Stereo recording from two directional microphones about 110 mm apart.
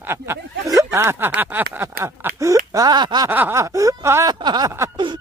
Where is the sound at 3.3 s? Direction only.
15° right (ahead or behind).